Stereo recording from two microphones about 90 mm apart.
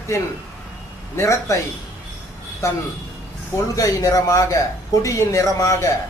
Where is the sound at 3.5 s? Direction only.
40° left (ahead or behind).